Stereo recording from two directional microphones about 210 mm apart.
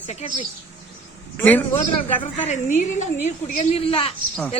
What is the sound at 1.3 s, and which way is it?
Speech, 10° left (ahead or behind).